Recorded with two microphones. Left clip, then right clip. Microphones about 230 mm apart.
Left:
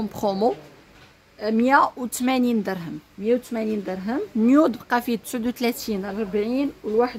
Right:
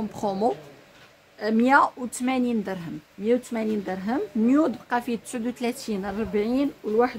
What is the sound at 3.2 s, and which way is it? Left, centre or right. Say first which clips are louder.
Speech: left 1 dB; centre.